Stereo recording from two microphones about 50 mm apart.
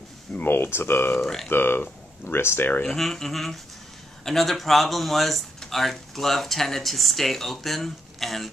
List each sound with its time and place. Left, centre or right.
0.3 s speech: left
1.2 s speech: centre
1.5 s speech: left
2.9 s speech: centre